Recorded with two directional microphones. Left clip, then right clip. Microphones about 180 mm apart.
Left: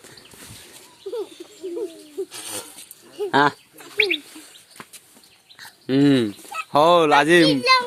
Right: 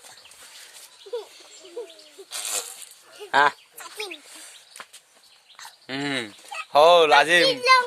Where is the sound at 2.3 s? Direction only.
65° right (ahead or behind).